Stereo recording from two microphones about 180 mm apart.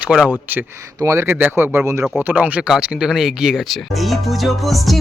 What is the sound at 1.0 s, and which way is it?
Speech, 15° right (ahead or behind).